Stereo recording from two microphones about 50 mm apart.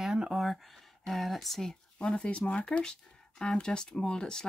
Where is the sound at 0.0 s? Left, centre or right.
Centre.